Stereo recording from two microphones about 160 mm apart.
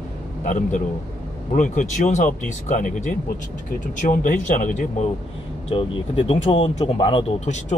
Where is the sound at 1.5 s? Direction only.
55° left (ahead or behind).